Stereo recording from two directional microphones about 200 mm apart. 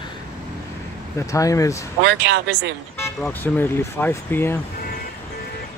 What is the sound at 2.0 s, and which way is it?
Speech, 60° right (ahead or behind).